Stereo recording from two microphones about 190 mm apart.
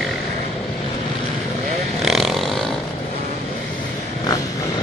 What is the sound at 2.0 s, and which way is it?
Vehicle, centre (ahead or behind).